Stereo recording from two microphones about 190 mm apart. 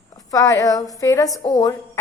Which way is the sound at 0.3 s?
15° left (ahead or behind).